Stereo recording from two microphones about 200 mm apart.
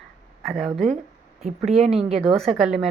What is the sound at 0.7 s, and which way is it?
Speech, 35° right (ahead or behind).